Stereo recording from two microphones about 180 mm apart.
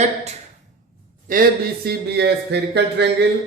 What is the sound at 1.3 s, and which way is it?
Speech, 55° right (ahead or behind).